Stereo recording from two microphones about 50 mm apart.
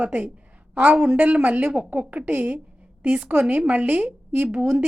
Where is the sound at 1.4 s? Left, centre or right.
Right.